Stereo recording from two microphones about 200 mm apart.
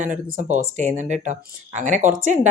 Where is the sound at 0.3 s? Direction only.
35° right (ahead or behind).